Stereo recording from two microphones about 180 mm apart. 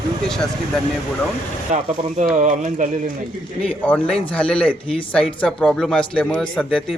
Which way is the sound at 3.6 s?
5° left (ahead or behind).